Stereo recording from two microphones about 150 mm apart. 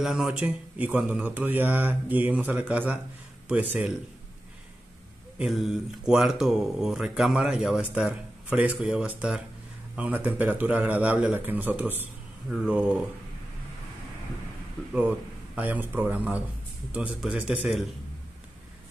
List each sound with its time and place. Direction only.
0.0 s speech: 5° right (ahead or behind)
5.4 s speech: centre (ahead or behind)
14.9 s speech: 10° right (ahead or behind)